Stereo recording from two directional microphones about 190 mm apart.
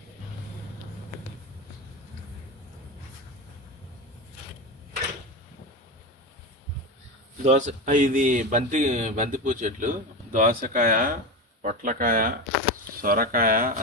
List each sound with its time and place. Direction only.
7.4 s speech: 40° right (ahead or behind)